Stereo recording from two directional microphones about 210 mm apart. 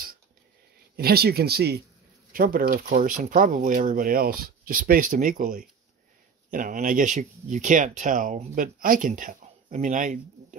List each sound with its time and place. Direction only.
0.9 s speech: 45° right (ahead or behind)